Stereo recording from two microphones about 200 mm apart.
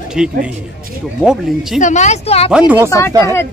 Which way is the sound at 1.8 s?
35° left (ahead or behind).